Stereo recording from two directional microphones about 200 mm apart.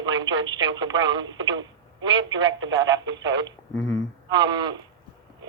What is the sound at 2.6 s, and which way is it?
Speech, 70° right (ahead or behind).